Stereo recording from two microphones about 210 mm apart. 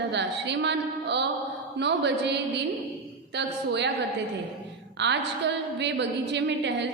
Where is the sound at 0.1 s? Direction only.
55° right (ahead or behind).